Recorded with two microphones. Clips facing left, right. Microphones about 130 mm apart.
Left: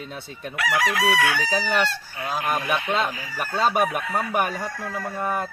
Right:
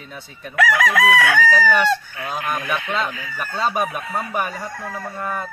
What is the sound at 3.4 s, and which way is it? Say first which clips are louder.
Speech: left 1 dB; 5° left (ahead or behind).